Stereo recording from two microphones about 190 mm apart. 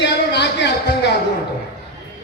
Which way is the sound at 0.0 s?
65° left (ahead or behind).